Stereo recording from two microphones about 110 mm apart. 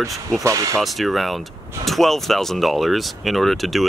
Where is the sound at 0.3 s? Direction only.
30° right (ahead or behind).